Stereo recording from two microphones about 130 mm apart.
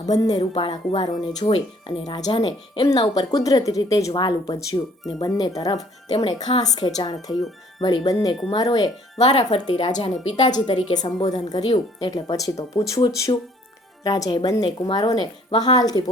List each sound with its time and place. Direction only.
0.0 s speech: 30° left (ahead or behind)
2.9 s speech: 30° left (ahead or behind)
6.1 s speech: 45° left (ahead or behind)
6.6 s speech: 35° left (ahead or behind)